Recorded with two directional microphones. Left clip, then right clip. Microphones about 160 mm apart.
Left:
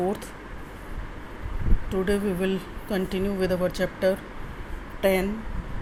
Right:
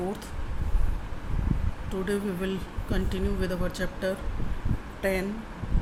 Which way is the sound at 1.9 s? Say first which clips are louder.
Left 5 dB; 20° left (ahead or behind).